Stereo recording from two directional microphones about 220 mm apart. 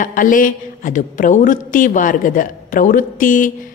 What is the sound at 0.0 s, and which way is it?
A woman's voice, 35° left (ahead or behind).